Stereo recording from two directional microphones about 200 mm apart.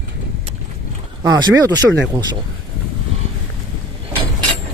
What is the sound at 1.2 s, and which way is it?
Speech, 20° right (ahead or behind).